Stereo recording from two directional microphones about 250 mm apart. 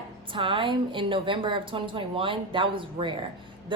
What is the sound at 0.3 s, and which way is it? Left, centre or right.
A woman's voice, centre.